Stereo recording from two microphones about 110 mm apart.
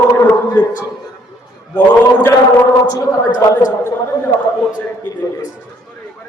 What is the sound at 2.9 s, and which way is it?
Speech, 30° left (ahead or behind).